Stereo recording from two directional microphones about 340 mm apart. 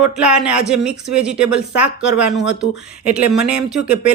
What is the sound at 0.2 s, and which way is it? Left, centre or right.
Speech, centre.